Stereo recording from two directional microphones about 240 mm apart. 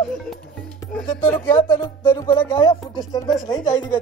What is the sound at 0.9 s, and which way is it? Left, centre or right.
Music, centre.